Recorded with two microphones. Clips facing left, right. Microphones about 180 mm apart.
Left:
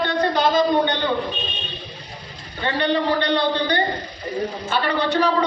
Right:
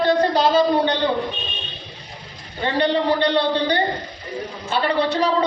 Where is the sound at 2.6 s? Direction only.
30° right (ahead or behind).